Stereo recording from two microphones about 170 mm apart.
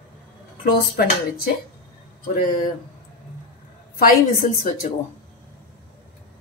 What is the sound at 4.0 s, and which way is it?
Speech, 55° left (ahead or behind).